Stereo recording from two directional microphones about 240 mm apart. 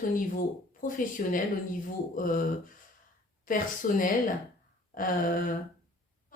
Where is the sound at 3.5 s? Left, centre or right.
Left.